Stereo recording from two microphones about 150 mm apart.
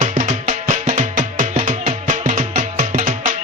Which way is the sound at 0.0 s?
55° right (ahead or behind).